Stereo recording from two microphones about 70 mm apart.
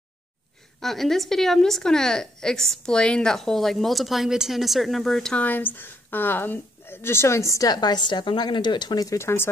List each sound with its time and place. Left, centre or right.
0.7 s a woman's voice: centre
5.3 s a woman's voice: left
9.2 s speech: left